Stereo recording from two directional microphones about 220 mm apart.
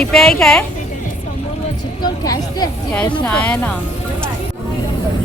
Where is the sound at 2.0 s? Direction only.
15° left (ahead or behind).